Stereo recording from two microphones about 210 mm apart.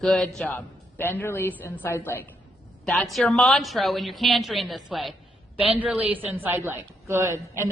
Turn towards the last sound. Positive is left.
turn(degrees=-15)  # may be behind; listen again after turning